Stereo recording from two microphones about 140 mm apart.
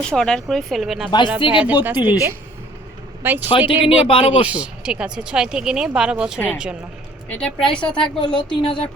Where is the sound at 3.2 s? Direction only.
15° right (ahead or behind).